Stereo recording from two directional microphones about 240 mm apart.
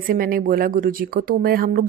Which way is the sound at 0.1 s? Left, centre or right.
Right.